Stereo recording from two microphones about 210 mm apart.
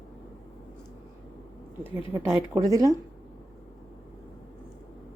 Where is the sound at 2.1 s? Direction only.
10° right (ahead or behind).